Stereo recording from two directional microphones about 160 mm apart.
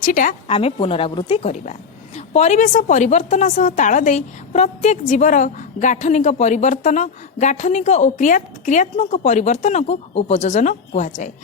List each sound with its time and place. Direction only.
0.0 s a woman's voice: 55° left (ahead or behind)
0.4 s speech: 40° left (ahead or behind)